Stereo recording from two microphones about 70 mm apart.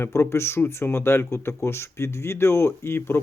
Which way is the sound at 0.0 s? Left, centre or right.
Left.